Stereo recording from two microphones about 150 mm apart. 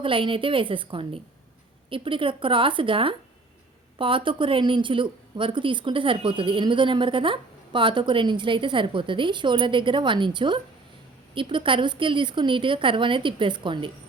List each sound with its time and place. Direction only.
0.0 s a woman's voice: 35° right (ahead or behind)